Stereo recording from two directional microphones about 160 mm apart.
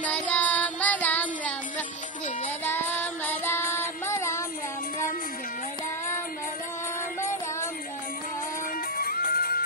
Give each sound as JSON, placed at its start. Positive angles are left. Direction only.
{"t": 0.0, "sound": "child singing", "side_deg": 10}
{"t": 8.9, "sound": "music", "side_deg": 60}